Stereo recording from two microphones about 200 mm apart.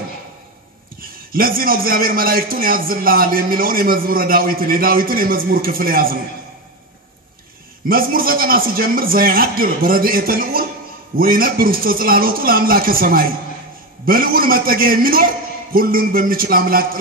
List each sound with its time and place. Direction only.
1.3 s a man's voice: 45° right (ahead or behind)
7.9 s a man's voice: 45° right (ahead or behind)